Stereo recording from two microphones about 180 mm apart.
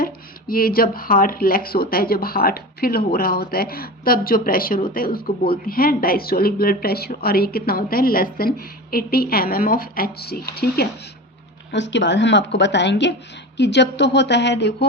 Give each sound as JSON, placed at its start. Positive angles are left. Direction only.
{"t": 0.0, "sound": "speech", "side_deg": 55}
{"t": 11.7, "sound": "a woman's voice", "side_deg": 80}